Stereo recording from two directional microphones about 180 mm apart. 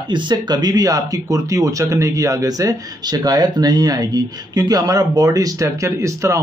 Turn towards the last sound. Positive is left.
turn(degrees=-15)  # may be behind; listen again after turning